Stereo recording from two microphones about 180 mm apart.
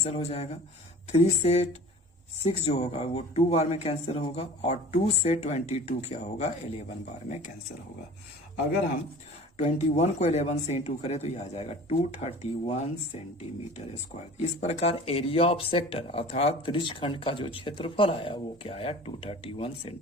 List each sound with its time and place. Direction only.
0.0 s speech: 35° left (ahead or behind)
9.6 s speech: 40° left (ahead or behind)
14.4 s speech: 35° left (ahead or behind)